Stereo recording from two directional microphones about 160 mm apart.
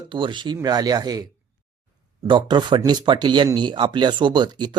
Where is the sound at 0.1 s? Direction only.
30° right (ahead or behind).